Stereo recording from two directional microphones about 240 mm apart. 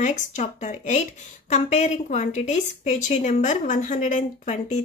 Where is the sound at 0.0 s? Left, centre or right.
Left.